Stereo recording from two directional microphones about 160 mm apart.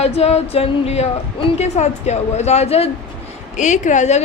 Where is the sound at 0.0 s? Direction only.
40° left (ahead or behind).